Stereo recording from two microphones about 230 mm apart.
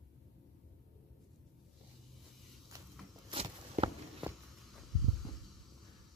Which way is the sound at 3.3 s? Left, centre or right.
Right.